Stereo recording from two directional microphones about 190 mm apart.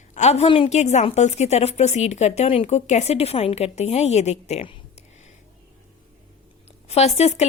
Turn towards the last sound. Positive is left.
turn(degrees=35)  # may be behind; listen again after turning